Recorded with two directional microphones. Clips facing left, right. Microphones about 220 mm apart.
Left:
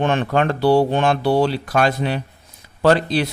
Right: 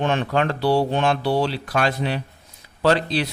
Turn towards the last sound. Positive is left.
turn(degrees=50)  # may be behind; listen again after turning